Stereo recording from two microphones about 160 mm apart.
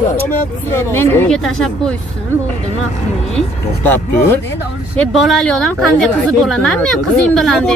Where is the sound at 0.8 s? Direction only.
15° left (ahead or behind).